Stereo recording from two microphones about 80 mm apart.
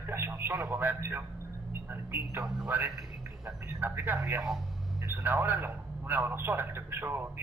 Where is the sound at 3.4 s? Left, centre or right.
Right.